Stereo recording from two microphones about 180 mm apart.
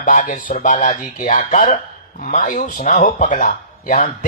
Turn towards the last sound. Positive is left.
turn(degrees=50)  # may be behind; listen again after turning